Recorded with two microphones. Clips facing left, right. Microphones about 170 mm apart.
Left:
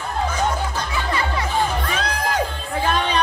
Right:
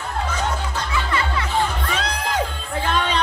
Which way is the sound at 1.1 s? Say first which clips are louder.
Left 1 dB; 25° left (ahead or behind).